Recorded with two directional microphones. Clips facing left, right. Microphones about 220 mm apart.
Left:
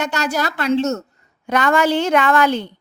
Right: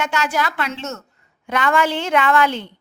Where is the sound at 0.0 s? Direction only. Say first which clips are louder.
Left 1 dB; 40° left (ahead or behind).